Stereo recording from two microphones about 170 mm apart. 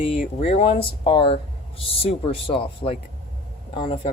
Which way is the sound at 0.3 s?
40° left (ahead or behind).